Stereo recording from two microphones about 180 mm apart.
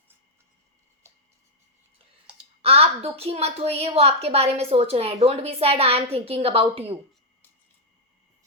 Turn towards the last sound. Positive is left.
turn(degrees=-30)  # may be behind; listen again after turning